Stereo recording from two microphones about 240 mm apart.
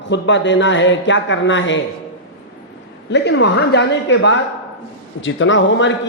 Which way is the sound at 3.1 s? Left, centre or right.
Left.